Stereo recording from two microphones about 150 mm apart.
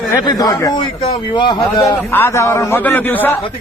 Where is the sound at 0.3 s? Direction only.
25° left (ahead or behind).